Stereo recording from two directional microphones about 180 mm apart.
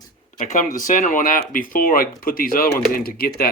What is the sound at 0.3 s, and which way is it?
Speech, 45° left (ahead or behind).